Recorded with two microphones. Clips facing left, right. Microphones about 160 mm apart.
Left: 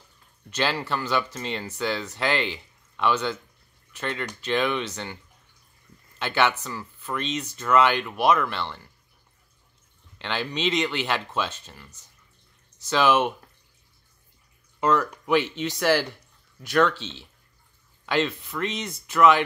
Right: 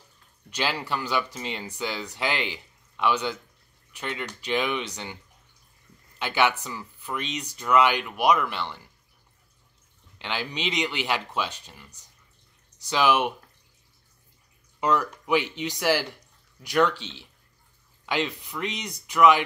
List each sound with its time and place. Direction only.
0.5 s speech: 10° right (ahead or behind)
6.1 s speech: 10° right (ahead or behind)
10.1 s speech: 10° right (ahead or behind)
14.8 s speech: 15° right (ahead or behind)